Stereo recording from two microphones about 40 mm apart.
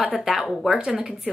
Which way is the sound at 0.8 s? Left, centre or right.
Centre.